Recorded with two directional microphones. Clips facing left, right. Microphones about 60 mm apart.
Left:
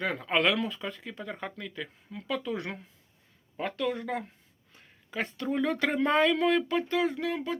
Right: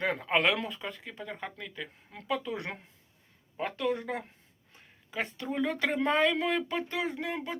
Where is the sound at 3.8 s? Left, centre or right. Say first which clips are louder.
Even; centre.